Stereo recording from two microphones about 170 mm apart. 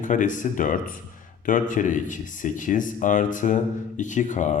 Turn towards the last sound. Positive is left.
turn(degrees=45)  # may be behind; listen again after turning